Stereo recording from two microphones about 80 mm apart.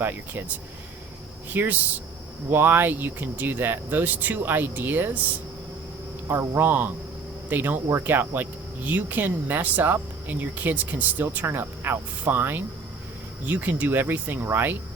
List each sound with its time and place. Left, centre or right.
0.0 s speech: right
1.5 s speech: right
6.2 s speech: right